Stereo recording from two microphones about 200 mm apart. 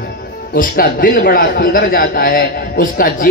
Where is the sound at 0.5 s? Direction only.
45° left (ahead or behind).